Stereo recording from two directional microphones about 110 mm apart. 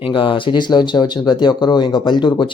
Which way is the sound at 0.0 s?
50° left (ahead or behind).